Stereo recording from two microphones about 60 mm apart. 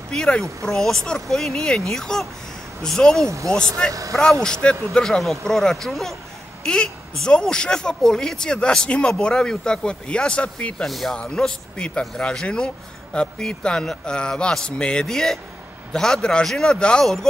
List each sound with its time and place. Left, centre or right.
0.1 s speech: centre
10.9 s speech: centre
11.1 s speech: centre